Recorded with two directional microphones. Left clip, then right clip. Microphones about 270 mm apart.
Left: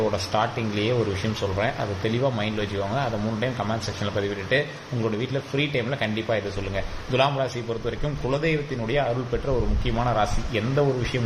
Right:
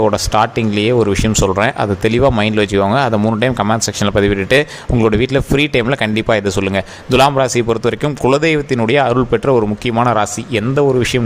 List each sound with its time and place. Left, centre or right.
0.1 s speech: right